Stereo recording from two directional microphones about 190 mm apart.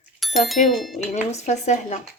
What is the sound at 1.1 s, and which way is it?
Speech, 35° left (ahead or behind).